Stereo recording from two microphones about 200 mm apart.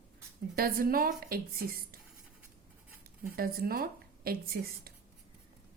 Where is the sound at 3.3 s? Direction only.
50° right (ahead or behind).